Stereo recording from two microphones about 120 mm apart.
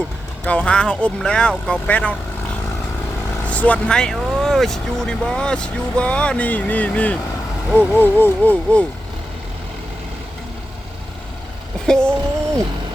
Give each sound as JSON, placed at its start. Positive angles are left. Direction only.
{"t": 0.4, "sound": "speech", "side_deg": 10}
{"t": 3.4, "sound": "speech", "side_deg": 10}
{"t": 11.9, "sound": "speech", "side_deg": 5}